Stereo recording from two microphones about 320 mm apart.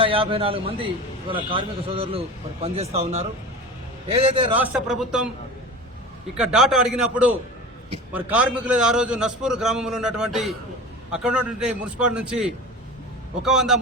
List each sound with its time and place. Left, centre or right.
0.0 s a man's voice: centre
4.6 s a man's voice: centre
6.3 s a man's voice: centre
8.1 s a man's voice: centre